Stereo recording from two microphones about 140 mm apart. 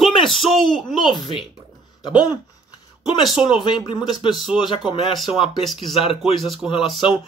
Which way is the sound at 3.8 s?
35° left (ahead or behind).